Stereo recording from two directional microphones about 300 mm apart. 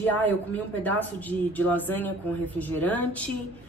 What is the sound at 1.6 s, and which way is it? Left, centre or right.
A woman's voice, centre.